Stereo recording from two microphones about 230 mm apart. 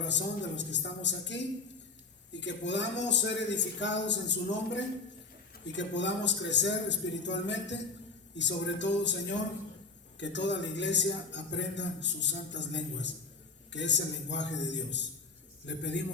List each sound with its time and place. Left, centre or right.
0.0 s a man's voice: left